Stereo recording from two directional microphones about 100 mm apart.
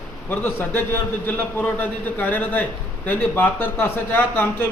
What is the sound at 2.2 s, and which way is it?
A man's voice, 15° left (ahead or behind).